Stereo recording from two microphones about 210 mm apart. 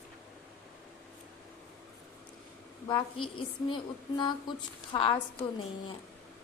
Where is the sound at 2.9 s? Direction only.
25° left (ahead or behind).